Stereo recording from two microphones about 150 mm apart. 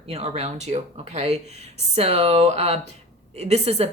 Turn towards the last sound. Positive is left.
turn(degrees=-45)  # may be behind; listen again after turning